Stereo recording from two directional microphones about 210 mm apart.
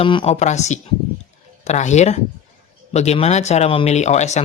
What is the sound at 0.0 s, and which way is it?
Speech, 25° left (ahead or behind).